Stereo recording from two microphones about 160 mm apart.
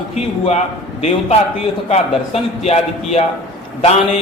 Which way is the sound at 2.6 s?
40° left (ahead or behind).